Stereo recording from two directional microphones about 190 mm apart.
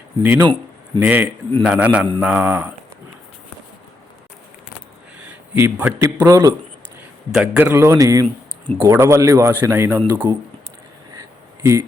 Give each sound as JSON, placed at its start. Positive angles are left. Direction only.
{"t": 0.2, "sound": "a man's voice", "side_deg": -10}
{"t": 5.5, "sound": "a man's voice", "side_deg": -10}
{"t": 7.3, "sound": "a man's voice", "side_deg": -5}
{"t": 11.1, "sound": "a sound", "side_deg": -15}